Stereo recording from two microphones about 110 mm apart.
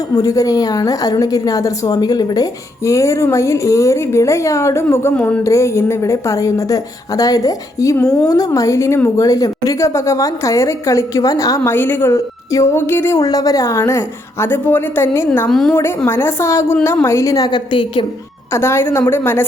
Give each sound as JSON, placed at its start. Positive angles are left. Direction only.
{"t": 0.2, "sound": "a woman's voice", "side_deg": 35}
{"t": 5.1, "sound": "a woman's voice", "side_deg": 10}
{"t": 5.4, "sound": "a woman's voice", "side_deg": 25}
{"t": 7.9, "sound": "a woman's voice", "side_deg": 10}
{"t": 8.3, "sound": "a woman's voice", "side_deg": 30}
{"t": 12.1, "sound": "a woman's voice", "side_deg": 30}
{"t": 13.2, "sound": "a woman's voice", "side_deg": 35}
{"t": 15.4, "sound": "a woman's voice", "side_deg": 5}
{"t": 16.0, "sound": "a woman's voice", "side_deg": 20}
{"t": 18.5, "sound": "a woman's voice", "side_deg": 25}